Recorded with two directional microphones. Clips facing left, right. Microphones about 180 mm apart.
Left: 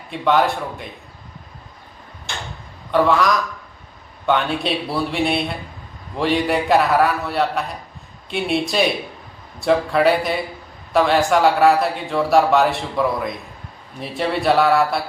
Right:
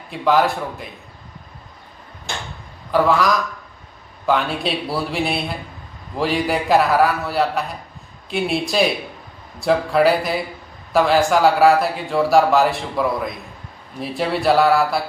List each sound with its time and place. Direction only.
0.1 s speech: centre (ahead or behind)
2.9 s speech: centre (ahead or behind)